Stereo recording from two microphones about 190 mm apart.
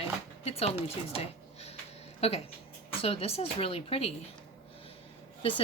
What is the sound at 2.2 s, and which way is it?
Speech, 35° left (ahead or behind).